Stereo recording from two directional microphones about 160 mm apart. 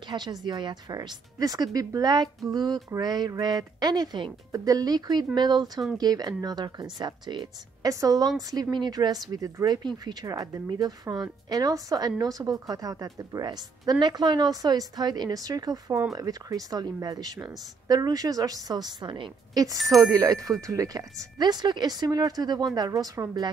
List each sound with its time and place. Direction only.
0.1 s a woman's voice: 25° right (ahead or behind)